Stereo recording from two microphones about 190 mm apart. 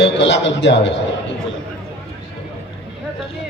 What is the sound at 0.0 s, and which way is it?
Speech, 65° left (ahead or behind).